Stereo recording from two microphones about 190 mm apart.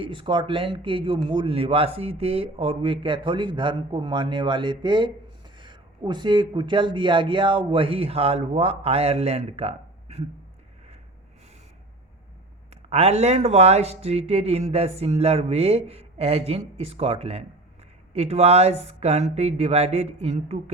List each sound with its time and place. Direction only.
0.0 s speech: 25° right (ahead or behind)
12.7 s speech: 35° right (ahead or behind)